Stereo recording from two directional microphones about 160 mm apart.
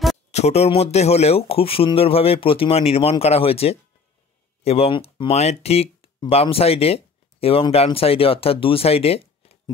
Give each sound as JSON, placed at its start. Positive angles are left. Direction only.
{"t": 0.3, "sound": "speech", "side_deg": 40}